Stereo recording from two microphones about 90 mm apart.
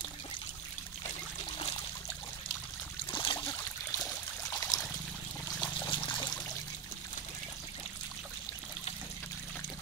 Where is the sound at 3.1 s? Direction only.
60° left (ahead or behind).